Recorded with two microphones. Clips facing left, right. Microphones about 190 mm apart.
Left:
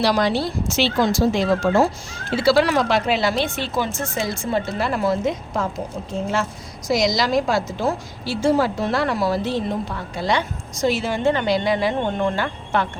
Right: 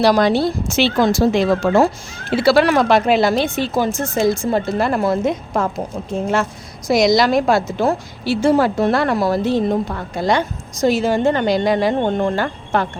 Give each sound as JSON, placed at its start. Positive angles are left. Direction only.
{"t": 0.0, "sound": "a woman's voice", "side_deg": -50}